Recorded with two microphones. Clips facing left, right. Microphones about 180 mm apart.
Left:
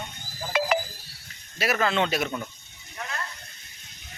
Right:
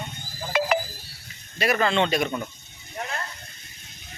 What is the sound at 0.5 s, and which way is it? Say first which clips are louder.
Wind chime: right 2 dB; 60° right (ahead or behind).